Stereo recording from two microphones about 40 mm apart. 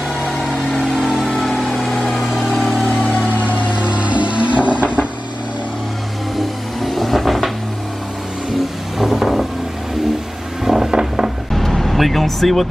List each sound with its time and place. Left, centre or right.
1.2 s vehicle: centre
3.3 s vehicle: left
3.6 s vehicle: right
6.8 s vehicle: centre
9.0 s vehicle: centre
10.6 s vehicle: centre
11.5 s vehicle: centre